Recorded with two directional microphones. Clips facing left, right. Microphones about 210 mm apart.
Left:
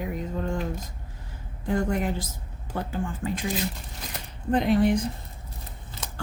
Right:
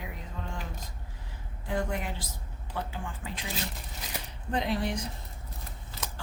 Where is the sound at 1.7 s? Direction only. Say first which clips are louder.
Left 7 dB; 45° left (ahead or behind).